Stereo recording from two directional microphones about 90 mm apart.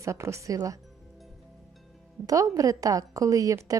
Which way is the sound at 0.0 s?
35° right (ahead or behind).